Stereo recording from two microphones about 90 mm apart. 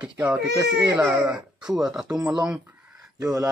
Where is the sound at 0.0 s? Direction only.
20° right (ahead or behind).